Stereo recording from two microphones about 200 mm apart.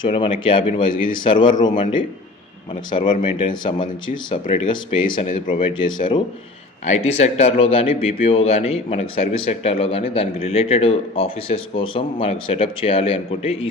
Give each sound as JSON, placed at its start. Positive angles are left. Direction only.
{"t": 0.0, "sound": "speech", "side_deg": 25}
{"t": 6.8, "sound": "a man's voice", "side_deg": 35}